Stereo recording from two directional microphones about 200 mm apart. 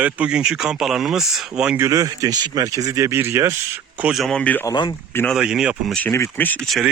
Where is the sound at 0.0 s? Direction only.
5° right (ahead or behind).